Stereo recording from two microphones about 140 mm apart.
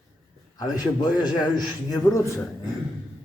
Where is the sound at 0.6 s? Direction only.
30° left (ahead or behind).